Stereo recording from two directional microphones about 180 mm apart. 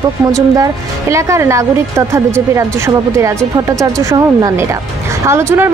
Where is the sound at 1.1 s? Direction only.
15° right (ahead or behind).